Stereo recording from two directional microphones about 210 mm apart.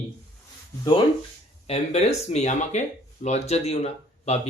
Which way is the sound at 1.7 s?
30° left (ahead or behind).